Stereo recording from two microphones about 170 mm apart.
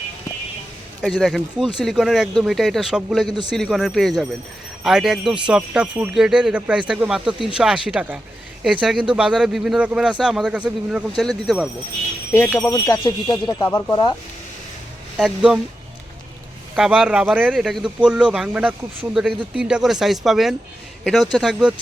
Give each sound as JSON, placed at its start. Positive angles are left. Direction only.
{"t": 1.0, "sound": "speech", "side_deg": 0}
{"t": 3.2, "sound": "a man's voice", "side_deg": -25}
{"t": 3.5, "sound": "speech", "side_deg": 0}
{"t": 12.5, "sound": "speech", "side_deg": 15}
{"t": 15.2, "sound": "speech", "side_deg": -5}
{"t": 16.7, "sound": "a man's voice", "side_deg": -5}